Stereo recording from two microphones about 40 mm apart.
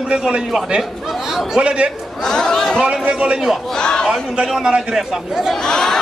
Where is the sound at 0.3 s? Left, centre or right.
Centre.